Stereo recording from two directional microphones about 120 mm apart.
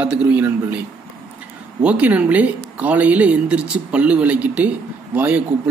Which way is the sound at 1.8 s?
10° right (ahead or behind).